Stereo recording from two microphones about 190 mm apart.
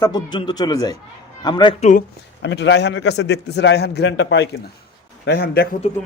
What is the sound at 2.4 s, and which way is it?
A man's voice, 65° left (ahead or behind).